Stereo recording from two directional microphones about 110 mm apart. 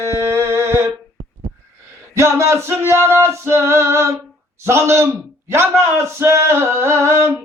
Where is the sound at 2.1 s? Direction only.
25° right (ahead or behind).